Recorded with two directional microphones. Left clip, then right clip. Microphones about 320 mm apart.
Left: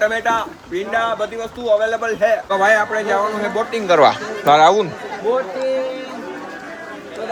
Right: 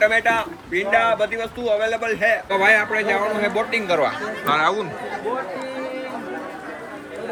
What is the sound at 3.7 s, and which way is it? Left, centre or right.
Speech, left.